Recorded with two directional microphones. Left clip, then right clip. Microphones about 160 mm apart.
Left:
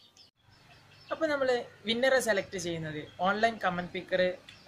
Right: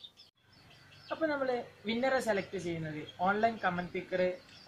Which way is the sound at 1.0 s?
25° left (ahead or behind).